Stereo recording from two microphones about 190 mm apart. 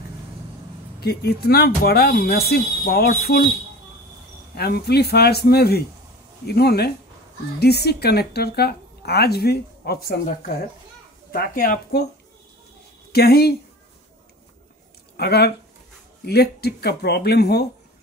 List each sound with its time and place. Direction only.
1.0 s a woman's voice: 55° left (ahead or behind)
4.6 s a woman's voice: 55° left (ahead or behind)
13.1 s a woman's voice: 55° left (ahead or behind)
15.1 s a woman's voice: 55° left (ahead or behind)